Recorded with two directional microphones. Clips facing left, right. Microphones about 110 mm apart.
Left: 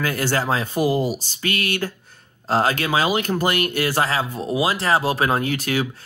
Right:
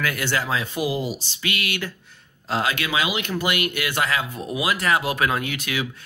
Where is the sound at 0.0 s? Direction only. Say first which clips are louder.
Left 3 dB; 40° left (ahead or behind).